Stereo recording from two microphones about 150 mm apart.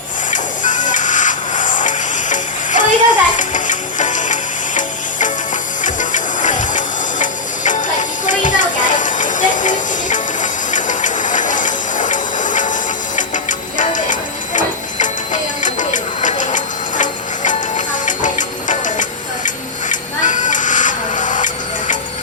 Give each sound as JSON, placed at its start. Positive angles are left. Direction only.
{"t": 0.3, "sound": "music", "side_deg": 55}
{"t": 5.8, "sound": "printer", "side_deg": 55}
{"t": 19.9, "sound": "a sound", "side_deg": 55}